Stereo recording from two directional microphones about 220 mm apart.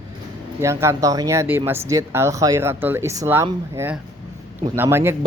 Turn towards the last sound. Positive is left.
turn(degrees=-10)  # may be behind; listen again after turning